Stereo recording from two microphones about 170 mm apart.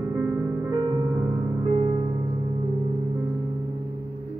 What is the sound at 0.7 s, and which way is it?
Music, 25° right (ahead or behind).